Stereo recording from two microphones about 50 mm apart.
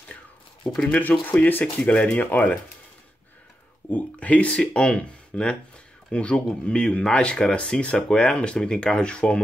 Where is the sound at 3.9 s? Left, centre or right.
Left.